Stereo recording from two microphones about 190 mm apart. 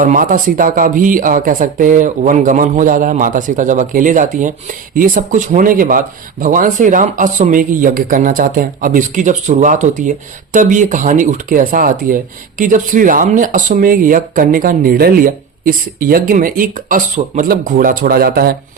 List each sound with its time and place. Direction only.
0.0 s speech: 45° right (ahead or behind)